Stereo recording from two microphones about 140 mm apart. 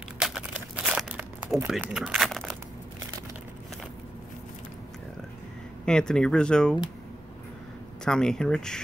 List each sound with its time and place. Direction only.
0.2 s crumpling: 5° right (ahead or behind)
5.9 s speech: 5° left (ahead or behind)
8.0 s speech: 5° left (ahead or behind)